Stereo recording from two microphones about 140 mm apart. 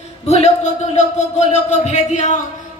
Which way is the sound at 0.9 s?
55° left (ahead or behind).